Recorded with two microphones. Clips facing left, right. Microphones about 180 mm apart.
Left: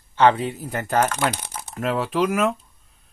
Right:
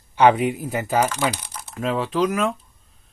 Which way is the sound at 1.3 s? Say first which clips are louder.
Left 2 dB; 55° left (ahead or behind).